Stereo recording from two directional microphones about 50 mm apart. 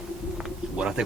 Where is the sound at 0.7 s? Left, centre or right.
Centre.